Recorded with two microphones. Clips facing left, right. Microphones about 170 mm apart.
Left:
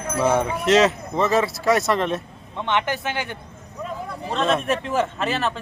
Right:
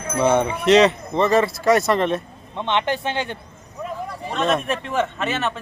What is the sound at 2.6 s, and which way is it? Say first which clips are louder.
Speech: right 2 dB; 20° right (ahead or behind).